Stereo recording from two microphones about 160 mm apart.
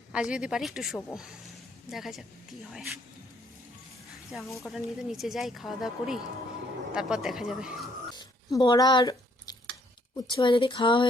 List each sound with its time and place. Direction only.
0.1 s speech: 5° right (ahead or behind)
4.6 s speech: centre (ahead or behind)
8.1 s a sound: 25° left (ahead or behind)
10.2 s a woman's voice: 30° left (ahead or behind)